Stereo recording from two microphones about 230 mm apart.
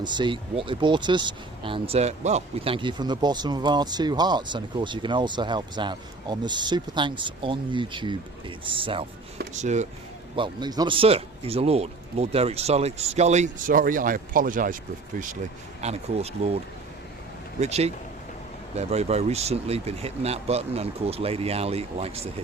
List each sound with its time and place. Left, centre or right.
0.0 s speech: centre
10.3 s speech: centre; by 14.8 s right
15.8 s speech: right
17.6 s speech: right